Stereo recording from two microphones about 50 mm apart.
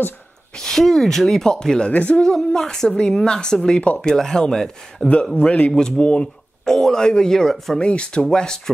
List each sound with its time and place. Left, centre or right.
0.6 s a woman's voice: centre
1.9 s a man's voice: left
2.2 s a woman's voice: centre
5.0 s a man's voice: centre
5.7 s a woman's voice: centre
7.8 s a man's voice: left